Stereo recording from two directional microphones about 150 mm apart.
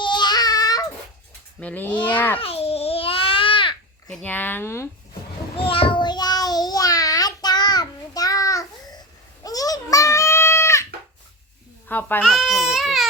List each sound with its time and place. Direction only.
0.0 s child singing: 30° left (ahead or behind)
1.5 s speech: 10° left (ahead or behind)
2.0 s a sound: 10° left (ahead or behind)
2.4 s babbling: 40° left (ahead or behind)
4.1 s speech: 10° left (ahead or behind)
5.5 s child singing: 35° left (ahead or behind); by 10.8 s 20° left (ahead or behind)
11.9 s speech: 10° left (ahead or behind)
12.3 s speech: centre (ahead or behind)